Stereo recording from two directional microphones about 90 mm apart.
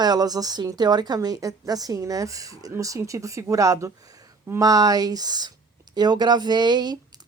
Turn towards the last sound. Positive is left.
turn(degrees=-50)  # may be behind; listen again after turning